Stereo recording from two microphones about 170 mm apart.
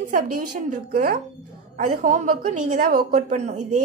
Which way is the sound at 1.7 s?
50° right (ahead or behind).